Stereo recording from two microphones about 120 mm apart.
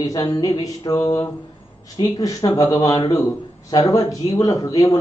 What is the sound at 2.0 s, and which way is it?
A man's voice, 35° left (ahead or behind).